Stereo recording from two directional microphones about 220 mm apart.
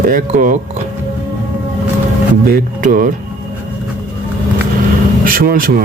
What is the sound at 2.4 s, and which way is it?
Speech, 40° right (ahead or behind).